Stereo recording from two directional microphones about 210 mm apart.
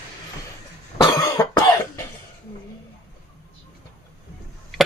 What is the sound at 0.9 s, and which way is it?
Cough, 15° left (ahead or behind).